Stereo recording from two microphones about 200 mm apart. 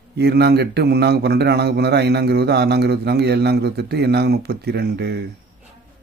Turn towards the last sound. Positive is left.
turn(degrees=-55)  # may be behind; listen again after turning